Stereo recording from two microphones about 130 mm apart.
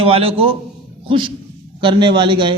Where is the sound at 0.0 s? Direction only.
45° right (ahead or behind).